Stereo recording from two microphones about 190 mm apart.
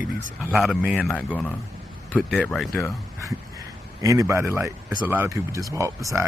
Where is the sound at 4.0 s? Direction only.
15° right (ahead or behind).